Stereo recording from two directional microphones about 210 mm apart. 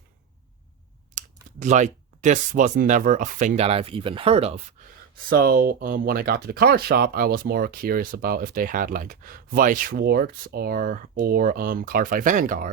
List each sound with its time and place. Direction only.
1.1 s speech: 35° right (ahead or behind)
5.3 s speech: 45° right (ahead or behind)